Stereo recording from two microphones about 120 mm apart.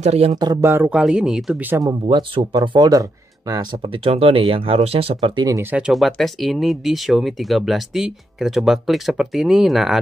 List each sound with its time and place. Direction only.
0.0 s speech: 60° right (ahead or behind)
0.4 s speech: 30° right (ahead or behind); by 1.6 s 5° right (ahead or behind)
1.8 s speech: 35° right (ahead or behind)
4.0 s speech: 55° right (ahead or behind)
5.6 s speech: 10° right (ahead or behind)